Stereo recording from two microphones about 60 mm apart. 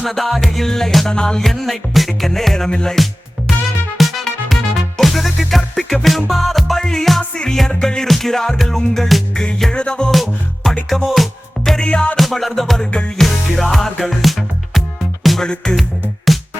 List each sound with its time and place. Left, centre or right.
0.0 s music: centre
3.9 s music: centre
7.2 s music: centre
10.1 s music: centre
11.9 s music: centre
12.1 s music: centre